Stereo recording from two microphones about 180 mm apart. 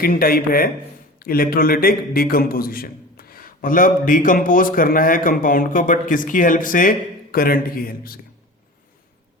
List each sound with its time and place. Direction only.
0.0 s a man's voice: 55° left (ahead or behind)